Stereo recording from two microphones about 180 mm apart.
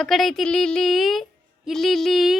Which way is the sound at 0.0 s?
Centre (ahead or behind).